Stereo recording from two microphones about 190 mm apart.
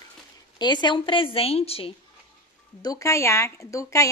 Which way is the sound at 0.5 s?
25° left (ahead or behind).